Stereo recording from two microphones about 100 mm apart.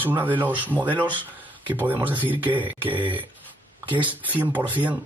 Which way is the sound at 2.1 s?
20° right (ahead or behind).